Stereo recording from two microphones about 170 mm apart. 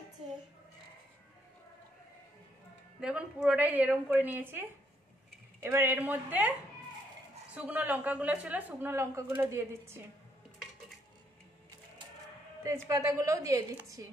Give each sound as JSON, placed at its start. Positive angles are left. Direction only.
{"t": 3.0, "sound": "a woman's voice", "side_deg": -5}
{"t": 7.5, "sound": "a woman's voice", "side_deg": -10}
{"t": 12.6, "sound": "a woman's voice", "side_deg": -15}